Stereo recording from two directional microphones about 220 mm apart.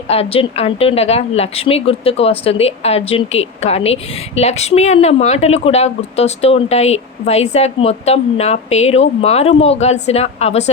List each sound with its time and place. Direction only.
0.1 s a woman's voice: 25° left (ahead or behind)